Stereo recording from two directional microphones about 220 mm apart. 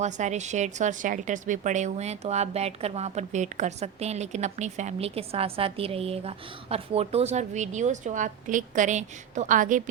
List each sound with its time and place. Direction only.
0.0 s a woman's voice: 30° right (ahead or behind)